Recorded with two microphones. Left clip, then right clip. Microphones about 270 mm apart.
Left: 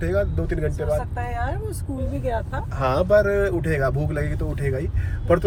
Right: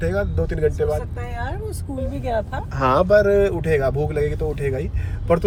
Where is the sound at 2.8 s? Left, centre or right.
Right.